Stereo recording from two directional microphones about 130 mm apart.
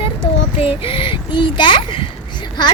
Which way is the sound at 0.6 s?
45° left (ahead or behind).